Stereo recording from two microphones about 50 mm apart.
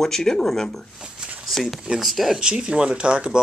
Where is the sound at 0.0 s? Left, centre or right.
Centre.